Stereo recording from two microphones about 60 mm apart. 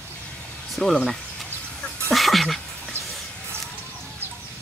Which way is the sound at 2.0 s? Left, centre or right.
Centre.